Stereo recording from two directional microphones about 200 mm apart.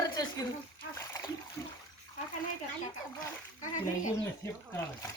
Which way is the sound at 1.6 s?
15° left (ahead or behind).